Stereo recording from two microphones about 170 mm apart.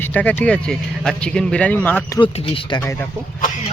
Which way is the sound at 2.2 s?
30° left (ahead or behind).